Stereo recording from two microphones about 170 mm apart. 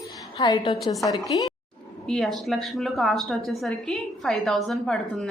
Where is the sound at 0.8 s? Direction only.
Centre (ahead or behind).